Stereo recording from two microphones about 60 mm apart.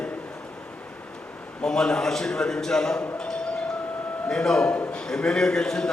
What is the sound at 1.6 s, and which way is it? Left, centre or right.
A man's voice, centre.